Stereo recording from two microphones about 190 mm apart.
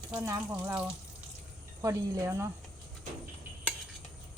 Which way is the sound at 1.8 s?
15° right (ahead or behind).